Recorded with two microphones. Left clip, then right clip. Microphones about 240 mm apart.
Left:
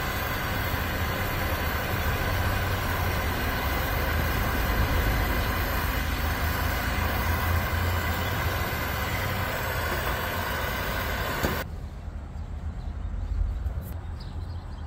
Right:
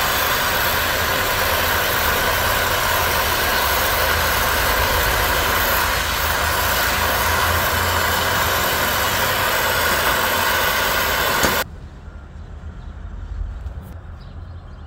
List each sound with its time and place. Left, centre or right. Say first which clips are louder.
0.0 s vehicle: right 12 dB; right